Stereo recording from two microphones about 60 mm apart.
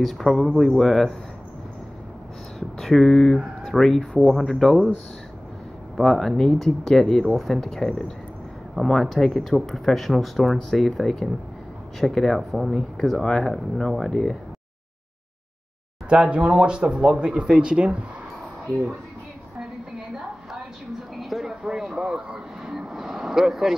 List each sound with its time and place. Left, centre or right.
0.0 s speech: centre
2.8 s speech: centre
5.9 s speech: centre
16.1 s speech: centre
21.2 s a sound: centre
22.7 s vehicle: centre